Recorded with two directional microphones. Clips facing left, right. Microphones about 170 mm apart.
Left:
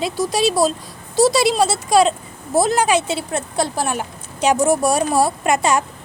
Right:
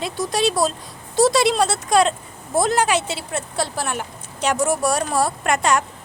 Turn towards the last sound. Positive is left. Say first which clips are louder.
# left 2 dB
turn(degrees=10)  # may be behind; listen again after turning